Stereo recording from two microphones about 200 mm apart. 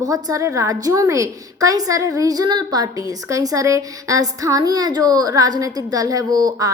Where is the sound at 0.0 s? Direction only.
15° right (ahead or behind).